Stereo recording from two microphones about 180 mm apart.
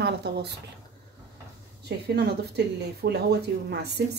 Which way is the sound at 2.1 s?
65° right (ahead or behind).